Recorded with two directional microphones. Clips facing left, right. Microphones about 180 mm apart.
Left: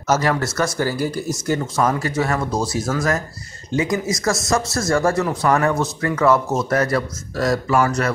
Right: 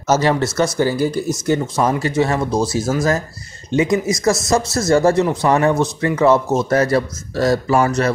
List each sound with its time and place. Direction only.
0.1 s speech: 25° right (ahead or behind)